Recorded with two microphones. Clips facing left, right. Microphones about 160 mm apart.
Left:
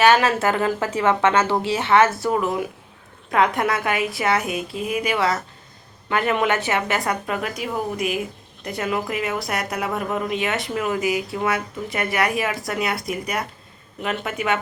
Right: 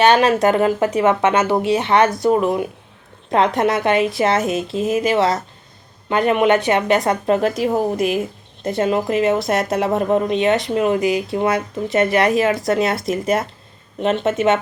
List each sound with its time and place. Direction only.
0.0 s a woman's voice: 20° right (ahead or behind)